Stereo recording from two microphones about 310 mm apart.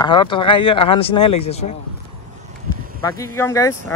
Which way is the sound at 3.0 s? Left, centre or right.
Centre.